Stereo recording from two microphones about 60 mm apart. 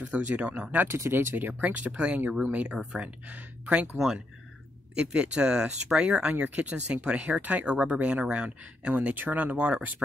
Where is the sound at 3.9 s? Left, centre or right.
Centre.